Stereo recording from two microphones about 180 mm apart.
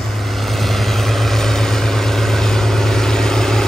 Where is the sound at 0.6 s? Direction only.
Centre (ahead or behind).